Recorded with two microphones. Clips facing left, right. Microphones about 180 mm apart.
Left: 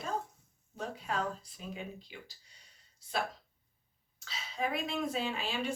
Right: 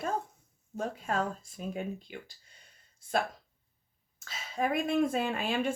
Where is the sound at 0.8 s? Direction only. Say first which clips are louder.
Right 4 dB; 45° right (ahead or behind).